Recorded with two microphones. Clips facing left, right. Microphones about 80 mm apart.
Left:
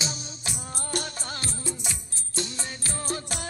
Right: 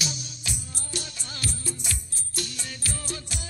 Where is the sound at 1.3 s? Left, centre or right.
Left.